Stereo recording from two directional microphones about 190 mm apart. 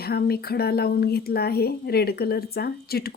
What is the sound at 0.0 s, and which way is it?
Speech, 55° left (ahead or behind).